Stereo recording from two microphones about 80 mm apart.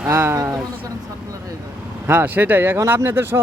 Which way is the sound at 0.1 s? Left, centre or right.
Right.